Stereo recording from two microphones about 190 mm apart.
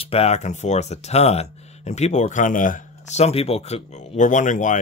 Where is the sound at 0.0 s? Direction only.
30° left (ahead or behind).